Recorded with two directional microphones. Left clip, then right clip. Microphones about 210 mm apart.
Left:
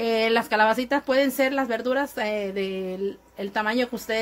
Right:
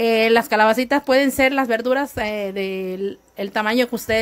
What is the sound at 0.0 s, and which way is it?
A woman's voice, 35° right (ahead or behind).